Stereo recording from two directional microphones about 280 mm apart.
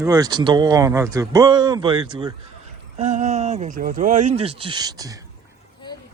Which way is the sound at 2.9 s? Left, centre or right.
Right.